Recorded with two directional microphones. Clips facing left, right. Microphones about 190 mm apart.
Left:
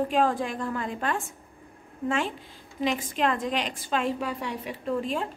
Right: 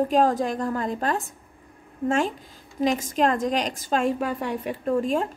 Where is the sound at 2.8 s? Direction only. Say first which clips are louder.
Right 5 dB; 45° right (ahead or behind).